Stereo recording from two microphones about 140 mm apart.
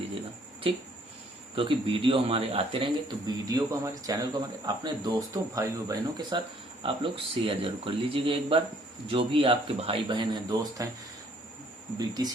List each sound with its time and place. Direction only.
0.7 s speech: 40° right (ahead or behind); by 6.4 s 25° right (ahead or behind)
6.8 s speech: 40° right (ahead or behind)
11.9 s speech: 30° right (ahead or behind)